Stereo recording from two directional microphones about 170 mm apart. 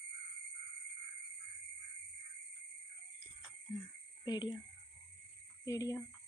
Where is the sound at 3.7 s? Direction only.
25° left (ahead or behind).